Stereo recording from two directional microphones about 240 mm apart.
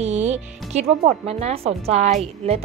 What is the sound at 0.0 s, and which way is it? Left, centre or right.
Speech, right.